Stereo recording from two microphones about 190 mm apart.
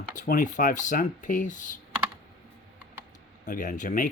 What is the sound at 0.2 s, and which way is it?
Speech, 45° left (ahead or behind).